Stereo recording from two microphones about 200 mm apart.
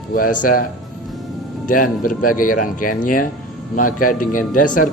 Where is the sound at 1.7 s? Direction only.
45° left (ahead or behind).